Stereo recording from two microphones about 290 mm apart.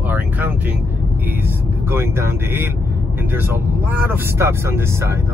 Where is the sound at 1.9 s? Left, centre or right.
Centre.